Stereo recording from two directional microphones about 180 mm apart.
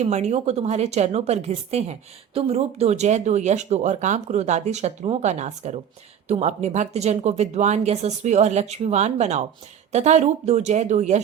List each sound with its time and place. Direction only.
0.0 s a woman's voice: 40° right (ahead or behind)